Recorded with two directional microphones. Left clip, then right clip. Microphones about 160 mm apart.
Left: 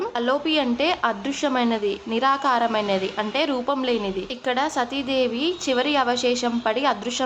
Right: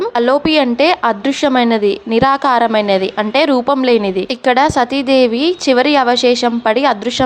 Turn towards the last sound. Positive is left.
turn(degrees=-40)  # may be behind; listen again after turning